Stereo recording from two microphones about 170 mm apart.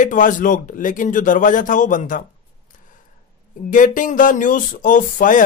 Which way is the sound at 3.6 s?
50° left (ahead or behind).